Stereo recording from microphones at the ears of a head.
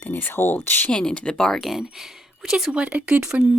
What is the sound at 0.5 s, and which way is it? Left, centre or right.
Speech, centre.